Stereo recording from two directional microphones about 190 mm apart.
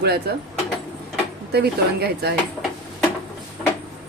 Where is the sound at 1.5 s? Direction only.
55° right (ahead or behind).